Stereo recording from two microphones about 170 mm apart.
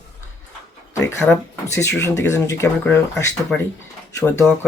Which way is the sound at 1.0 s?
10° left (ahead or behind).